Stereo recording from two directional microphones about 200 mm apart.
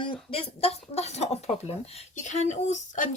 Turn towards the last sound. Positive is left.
turn(degrees=40)  # may be behind; listen again after turning